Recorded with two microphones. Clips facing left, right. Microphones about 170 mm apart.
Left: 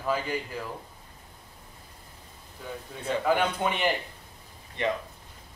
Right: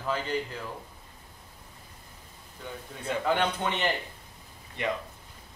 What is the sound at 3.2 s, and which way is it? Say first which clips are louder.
Speech: left 2 dB; 10° left (ahead or behind).